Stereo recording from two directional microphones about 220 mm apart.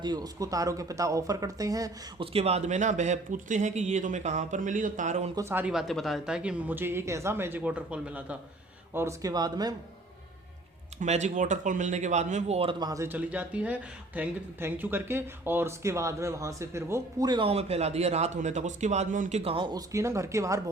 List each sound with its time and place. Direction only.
0.0 s speech: 20° right (ahead or behind); by 5.3 s 35° right (ahead or behind)
5.3 s speech: 15° right (ahead or behind)
11.0 s speech: 30° right (ahead or behind); by 20.7 s 15° right (ahead or behind)